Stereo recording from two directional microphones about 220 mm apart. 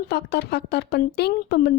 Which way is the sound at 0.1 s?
50° left (ahead or behind).